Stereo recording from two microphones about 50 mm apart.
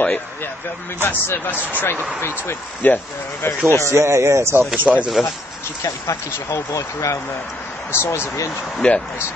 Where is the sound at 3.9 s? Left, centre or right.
Right.